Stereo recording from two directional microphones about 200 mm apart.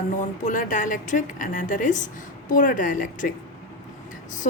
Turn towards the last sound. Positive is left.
turn(degrees=40)  # may be behind; listen again after turning